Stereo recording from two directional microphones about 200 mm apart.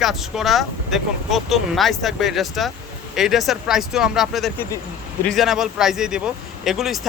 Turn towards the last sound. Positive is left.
turn(degrees=0)  # may be behind; listen again after turning